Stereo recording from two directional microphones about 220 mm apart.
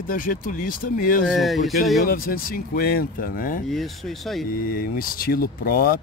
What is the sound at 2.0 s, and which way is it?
Speech, 40° left (ahead or behind).